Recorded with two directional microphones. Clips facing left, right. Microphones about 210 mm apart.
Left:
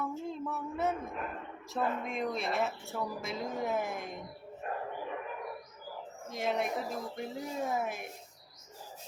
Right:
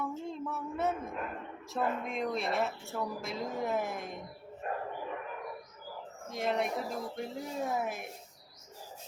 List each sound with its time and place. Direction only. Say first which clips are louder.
0.0 s a sound: even; centre (ahead or behind)
1.7 s speech: even; centre (ahead or behind)
6.2 s speech: right 1 dB; centre (ahead or behind)